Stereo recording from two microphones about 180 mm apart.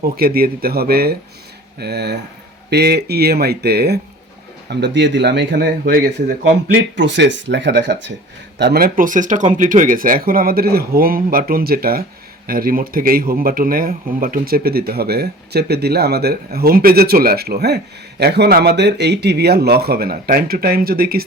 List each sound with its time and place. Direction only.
0.0 s a man's voice: 55° right (ahead or behind)
4.7 s speech: 75° right (ahead or behind); by 6.3 s 60° right (ahead or behind)
6.9 s a man's voice: 80° right; by 21.2 s 55° right (ahead or behind)